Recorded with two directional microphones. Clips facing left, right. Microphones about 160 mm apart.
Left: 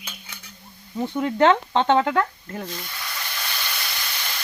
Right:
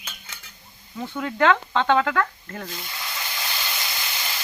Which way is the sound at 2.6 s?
5° right (ahead or behind).